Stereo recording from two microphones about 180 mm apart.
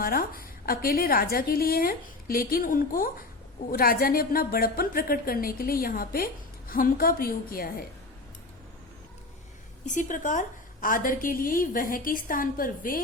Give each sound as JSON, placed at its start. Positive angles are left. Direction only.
{"t": 0.0, "sound": "a woman's voice", "side_deg": 55}
{"t": 9.8, "sound": "a woman's voice", "side_deg": 45}